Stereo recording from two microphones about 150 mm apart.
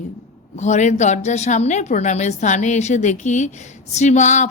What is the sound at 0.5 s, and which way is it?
A woman's voice, 50° left (ahead or behind).